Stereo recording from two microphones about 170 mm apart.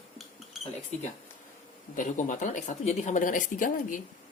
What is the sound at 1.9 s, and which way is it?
Speech, 50° left (ahead or behind).